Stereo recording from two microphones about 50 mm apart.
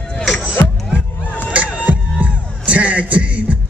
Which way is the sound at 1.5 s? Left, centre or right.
Right.